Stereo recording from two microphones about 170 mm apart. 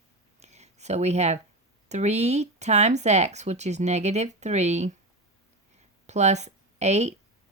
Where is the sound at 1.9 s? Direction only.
40° right (ahead or behind).